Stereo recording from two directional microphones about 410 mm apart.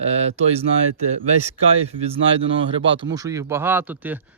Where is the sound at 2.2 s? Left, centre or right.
Right.